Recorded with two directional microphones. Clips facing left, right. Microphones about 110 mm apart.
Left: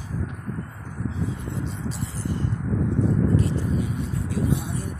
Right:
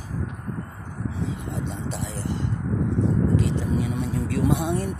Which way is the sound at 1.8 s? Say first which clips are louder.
Even; 75° right (ahead or behind).